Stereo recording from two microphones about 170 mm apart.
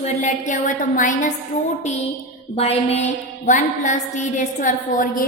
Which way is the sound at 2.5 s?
35° left (ahead or behind).